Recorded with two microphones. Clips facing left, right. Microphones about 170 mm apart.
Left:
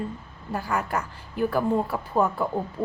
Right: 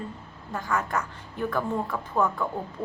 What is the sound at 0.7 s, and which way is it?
Speech, 10° left (ahead or behind).